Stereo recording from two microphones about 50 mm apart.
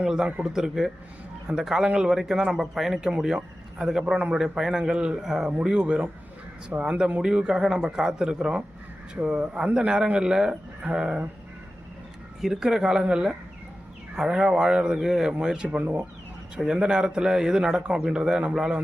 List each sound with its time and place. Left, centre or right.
0.0 s speech: centre
5.5 s speech: centre
12.4 s speech: centre; by 16.0 s right
16.6 s speech: centre